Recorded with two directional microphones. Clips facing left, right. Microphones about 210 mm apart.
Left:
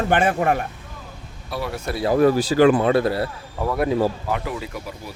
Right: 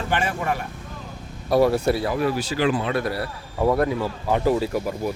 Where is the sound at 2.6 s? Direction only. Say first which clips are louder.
Left 7 dB; 50° left (ahead or behind).